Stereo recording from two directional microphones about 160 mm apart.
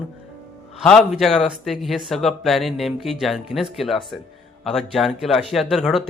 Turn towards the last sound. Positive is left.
turn(degrees=0)  # may be behind; listen again after turning